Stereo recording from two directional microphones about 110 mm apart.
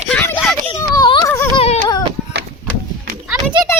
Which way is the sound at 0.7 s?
35° left (ahead or behind).